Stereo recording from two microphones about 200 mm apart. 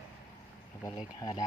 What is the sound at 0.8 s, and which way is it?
Speech, 20° left (ahead or behind).